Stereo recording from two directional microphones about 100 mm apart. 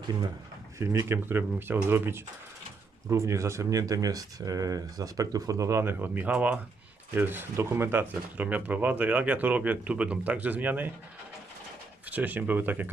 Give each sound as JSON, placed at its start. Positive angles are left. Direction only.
{"t": 0.8, "sound": "speech", "side_deg": -25}
{"t": 12.0, "sound": "speech", "side_deg": -15}